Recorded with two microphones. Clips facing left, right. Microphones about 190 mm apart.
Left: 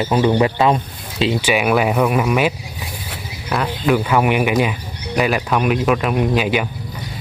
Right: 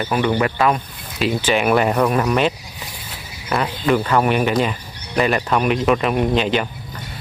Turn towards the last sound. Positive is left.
turn(degrees=10)  # may be behind; listen again after turning